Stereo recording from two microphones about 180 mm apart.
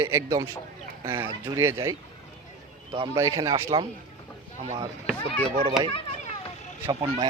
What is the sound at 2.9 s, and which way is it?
Speech, 20° right (ahead or behind).